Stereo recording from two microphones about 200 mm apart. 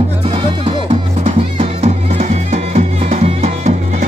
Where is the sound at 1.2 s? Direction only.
35° right (ahead or behind).